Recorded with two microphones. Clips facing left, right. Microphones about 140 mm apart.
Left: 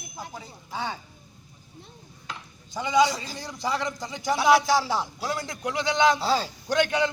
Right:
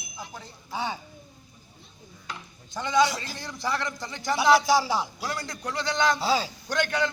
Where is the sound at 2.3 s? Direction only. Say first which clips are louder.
Even; 5° left (ahead or behind).